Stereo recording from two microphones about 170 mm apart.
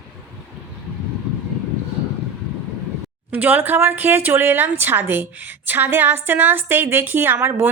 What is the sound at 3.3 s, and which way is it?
Speech, 10° right (ahead or behind).